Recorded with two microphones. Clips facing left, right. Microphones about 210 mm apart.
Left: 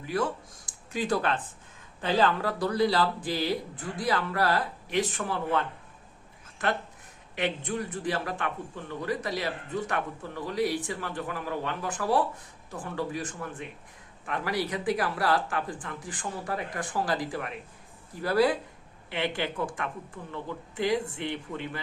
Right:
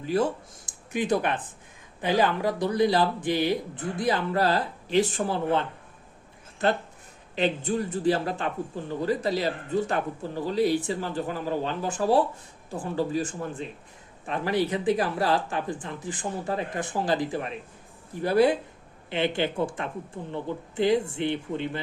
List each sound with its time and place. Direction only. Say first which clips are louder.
0.0 s a man's voice: right 4 dB; 25° right (ahead or behind)
7.3 s a man's voice: right 5 dB; 30° right (ahead or behind)